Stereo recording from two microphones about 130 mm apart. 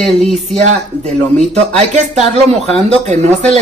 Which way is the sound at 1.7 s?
60° right (ahead or behind).